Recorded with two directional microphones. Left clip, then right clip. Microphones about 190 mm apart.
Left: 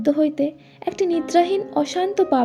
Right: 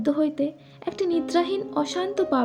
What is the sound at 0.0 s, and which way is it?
A woman's voice, 15° left (ahead or behind).